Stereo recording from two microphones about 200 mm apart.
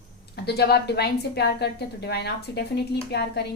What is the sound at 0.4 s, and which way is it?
A woman's voice, 55° left (ahead or behind).